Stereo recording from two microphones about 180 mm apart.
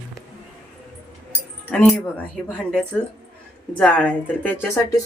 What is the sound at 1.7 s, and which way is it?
Speech, 5° left (ahead or behind).